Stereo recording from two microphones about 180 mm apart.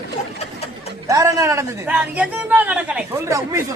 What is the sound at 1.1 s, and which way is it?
A man's voice, 20° right (ahead or behind).